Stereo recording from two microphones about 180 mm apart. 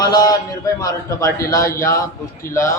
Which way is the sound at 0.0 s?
20° left (ahead or behind).